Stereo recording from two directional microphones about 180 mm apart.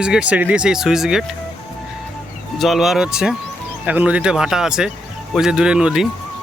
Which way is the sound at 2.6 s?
Centre (ahead or behind).